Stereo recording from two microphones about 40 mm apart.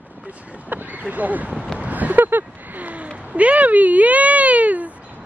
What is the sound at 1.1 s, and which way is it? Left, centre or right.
Speech, right.